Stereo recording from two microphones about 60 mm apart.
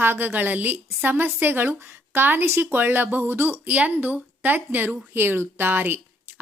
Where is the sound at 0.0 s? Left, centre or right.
Right.